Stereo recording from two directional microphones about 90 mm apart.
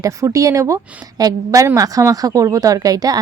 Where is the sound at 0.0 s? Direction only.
40° right (ahead or behind).